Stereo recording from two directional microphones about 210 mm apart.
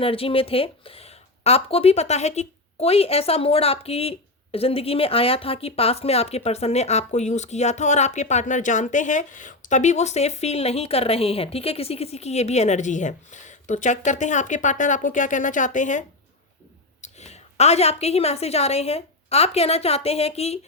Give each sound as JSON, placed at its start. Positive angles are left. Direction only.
{"t": 0.0, "sound": "a woman's voice", "side_deg": 25}